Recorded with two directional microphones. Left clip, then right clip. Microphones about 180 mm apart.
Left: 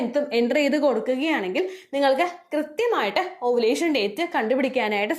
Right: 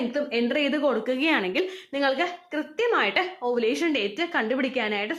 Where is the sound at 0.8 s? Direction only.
Centre (ahead or behind).